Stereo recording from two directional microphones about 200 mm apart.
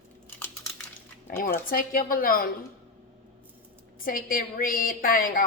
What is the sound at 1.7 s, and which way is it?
Speech, 45° left (ahead or behind).